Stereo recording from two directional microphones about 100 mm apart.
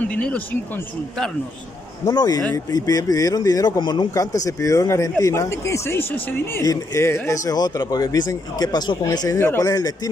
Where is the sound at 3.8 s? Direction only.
50° left (ahead or behind).